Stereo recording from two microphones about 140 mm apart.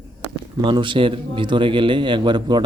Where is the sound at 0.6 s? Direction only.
35° right (ahead or behind).